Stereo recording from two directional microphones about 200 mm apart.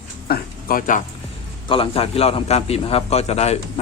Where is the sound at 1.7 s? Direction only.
30° left (ahead or behind).